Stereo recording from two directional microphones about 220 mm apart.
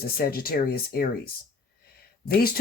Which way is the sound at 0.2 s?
45° left (ahead or behind).